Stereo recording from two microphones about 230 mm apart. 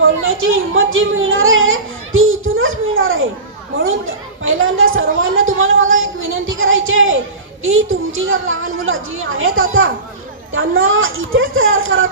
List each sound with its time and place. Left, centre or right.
0.0 s a sound: right
3.8 s chatter: right
7.6 s a woman's voice: right